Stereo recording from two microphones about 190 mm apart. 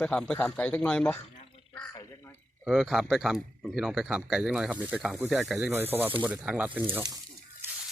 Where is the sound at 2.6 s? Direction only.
Centre (ahead or behind).